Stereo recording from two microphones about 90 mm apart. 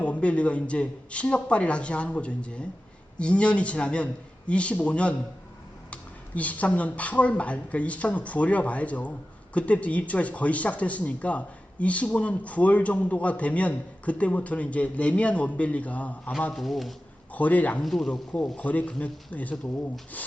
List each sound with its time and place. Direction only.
0.0 s speech: 15° left (ahead or behind)
16.6 s speech: centre (ahead or behind)
17.3 s speech: 15° left (ahead or behind)
17.8 s speech: 5° left (ahead or behind)